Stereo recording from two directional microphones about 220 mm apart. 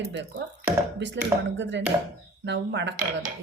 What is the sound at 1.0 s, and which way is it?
Speech, 50° right (ahead or behind).